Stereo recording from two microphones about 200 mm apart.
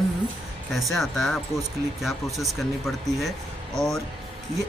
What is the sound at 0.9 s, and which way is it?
Speech, centre (ahead or behind).